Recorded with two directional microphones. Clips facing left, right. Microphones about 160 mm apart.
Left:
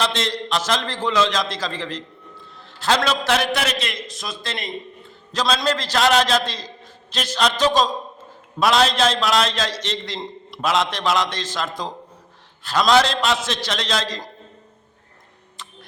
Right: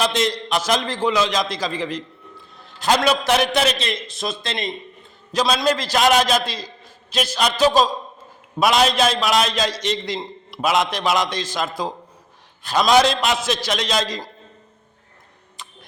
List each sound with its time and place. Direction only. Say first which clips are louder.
0.0 s a man's voice: right 3 dB; 15° right (ahead or behind)
5.3 s a man's voice: right 2 dB; 10° right (ahead or behind)
15.6 s a sound: even; 15° right (ahead or behind)